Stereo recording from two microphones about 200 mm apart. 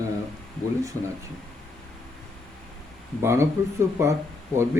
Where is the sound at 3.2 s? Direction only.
15° right (ahead or behind).